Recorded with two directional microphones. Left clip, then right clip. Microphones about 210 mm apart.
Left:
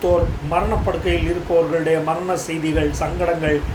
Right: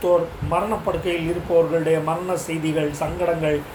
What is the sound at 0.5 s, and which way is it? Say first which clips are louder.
Speech: left 2 dB; 15° left (ahead or behind).